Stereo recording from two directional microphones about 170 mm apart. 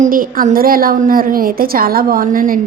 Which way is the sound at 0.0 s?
55° right (ahead or behind).